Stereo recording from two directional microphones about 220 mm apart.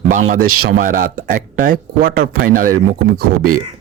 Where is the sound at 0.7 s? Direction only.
40° right (ahead or behind).